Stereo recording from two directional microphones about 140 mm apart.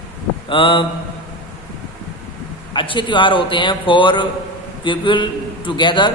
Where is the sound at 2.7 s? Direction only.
35° left (ahead or behind).